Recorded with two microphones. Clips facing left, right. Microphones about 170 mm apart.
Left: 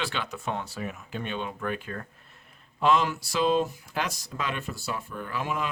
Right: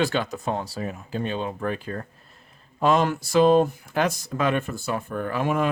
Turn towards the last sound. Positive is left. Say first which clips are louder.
# right 7 dB
turn(degrees=-50)  # may be behind; listen again after turning